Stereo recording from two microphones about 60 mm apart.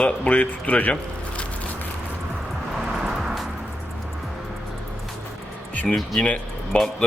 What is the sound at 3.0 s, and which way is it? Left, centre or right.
Music, centre.